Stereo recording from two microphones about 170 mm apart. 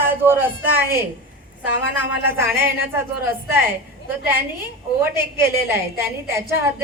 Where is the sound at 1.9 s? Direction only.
10° right (ahead or behind).